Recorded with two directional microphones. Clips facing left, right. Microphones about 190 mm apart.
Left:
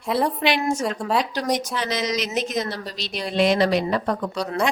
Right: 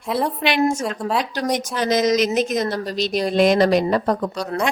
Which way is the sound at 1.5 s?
45° right (ahead or behind).